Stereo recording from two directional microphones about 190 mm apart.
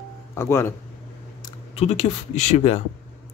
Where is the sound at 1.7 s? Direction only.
35° left (ahead or behind).